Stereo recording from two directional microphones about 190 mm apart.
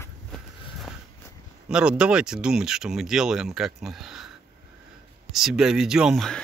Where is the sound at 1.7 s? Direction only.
5° right (ahead or behind).